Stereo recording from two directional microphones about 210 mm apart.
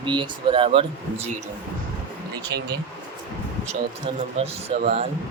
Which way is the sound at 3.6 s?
30° right (ahead or behind).